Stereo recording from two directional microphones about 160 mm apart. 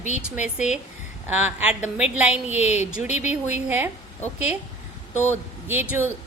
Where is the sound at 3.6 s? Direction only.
10° right (ahead or behind).